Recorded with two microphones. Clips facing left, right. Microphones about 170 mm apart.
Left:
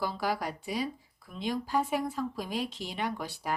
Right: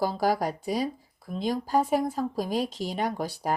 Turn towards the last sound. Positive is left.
turn(degrees=-40)  # may be behind; listen again after turning